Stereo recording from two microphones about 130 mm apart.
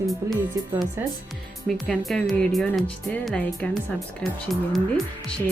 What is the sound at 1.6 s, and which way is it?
A woman's voice, centre (ahead or behind).